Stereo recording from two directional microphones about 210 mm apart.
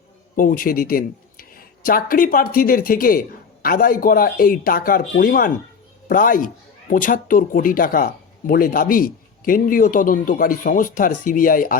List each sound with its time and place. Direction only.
0.3 s speech: 40° left (ahead or behind)